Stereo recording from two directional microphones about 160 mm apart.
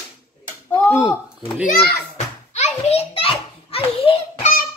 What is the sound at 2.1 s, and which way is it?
Children playing, 45° left (ahead or behind).